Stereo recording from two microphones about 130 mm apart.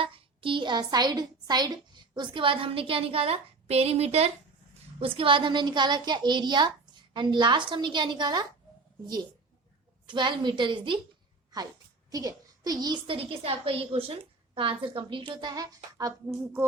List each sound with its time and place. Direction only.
0.0 s a woman's voice: 40° right (ahead or behind)
10.1 s a woman's voice: 35° right (ahead or behind)
12.1 s a woman's voice: 30° right (ahead or behind)